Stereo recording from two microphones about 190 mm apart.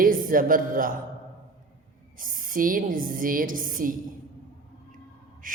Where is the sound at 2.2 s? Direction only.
45° right (ahead or behind).